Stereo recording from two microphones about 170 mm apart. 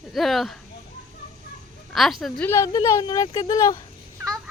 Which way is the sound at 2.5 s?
15° left (ahead or behind).